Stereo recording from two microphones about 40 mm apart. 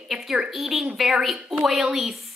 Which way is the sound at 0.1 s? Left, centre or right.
Centre.